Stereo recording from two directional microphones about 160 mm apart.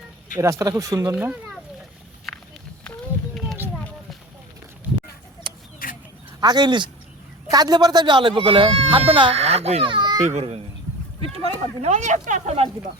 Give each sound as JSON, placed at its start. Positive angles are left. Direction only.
{"t": 0.6, "sound": "speech", "side_deg": -20}
{"t": 1.1, "sound": "speech", "side_deg": -5}
{"t": 3.8, "sound": "a sound", "side_deg": 5}
{"t": 5.8, "sound": "duck", "side_deg": 60}
{"t": 6.4, "sound": "speech", "side_deg": -25}
{"t": 10.2, "sound": "speech", "side_deg": -40}